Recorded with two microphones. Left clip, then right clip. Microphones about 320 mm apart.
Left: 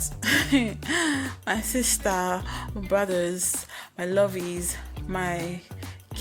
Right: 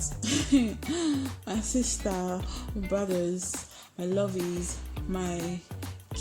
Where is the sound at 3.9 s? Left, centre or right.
Left.